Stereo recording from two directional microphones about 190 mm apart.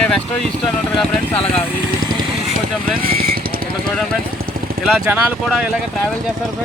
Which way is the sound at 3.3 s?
50° right (ahead or behind).